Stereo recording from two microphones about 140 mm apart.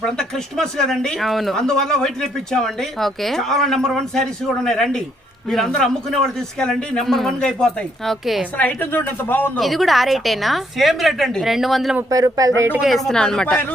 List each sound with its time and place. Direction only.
0.0 s speech: 5° left (ahead or behind)
8.5 s speech: 15° left (ahead or behind)
9.6 s speech: centre (ahead or behind)
12.1 s speech: 25° right (ahead or behind)
12.7 s speech: centre (ahead or behind)